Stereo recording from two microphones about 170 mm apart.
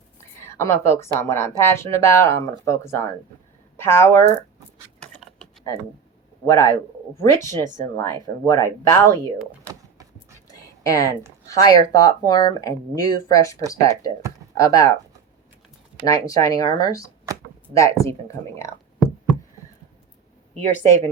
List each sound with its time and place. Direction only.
0.4 s a woman's voice: 15° left (ahead or behind)
4.9 s a sound: 5° left (ahead or behind)
6.4 s speech: 15° left (ahead or behind)
10.5 s a sound: 20° left (ahead or behind)
11.4 s speech: 20° left (ahead or behind)
16.0 s speech: 20° left (ahead or behind)
20.8 s speech: 15° left (ahead or behind)